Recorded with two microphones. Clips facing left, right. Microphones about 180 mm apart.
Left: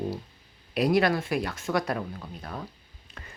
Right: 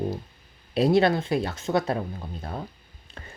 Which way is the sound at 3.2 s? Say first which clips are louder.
Right 3 dB; 30° right (ahead or behind).